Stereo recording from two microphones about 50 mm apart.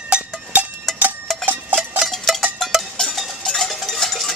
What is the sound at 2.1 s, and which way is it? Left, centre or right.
Cowbell, centre.